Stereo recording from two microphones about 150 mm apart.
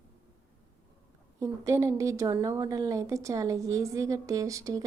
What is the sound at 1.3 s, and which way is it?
A woman's voice, 20° right (ahead or behind).